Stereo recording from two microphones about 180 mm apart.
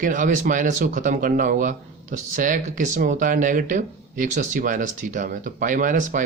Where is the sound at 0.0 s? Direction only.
45° right (ahead or behind).